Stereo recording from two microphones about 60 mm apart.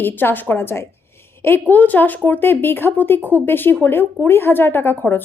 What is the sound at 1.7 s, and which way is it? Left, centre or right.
Speech, left.